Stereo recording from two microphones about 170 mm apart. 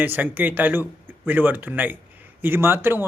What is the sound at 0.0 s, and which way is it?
Speech, 10° right (ahead or behind).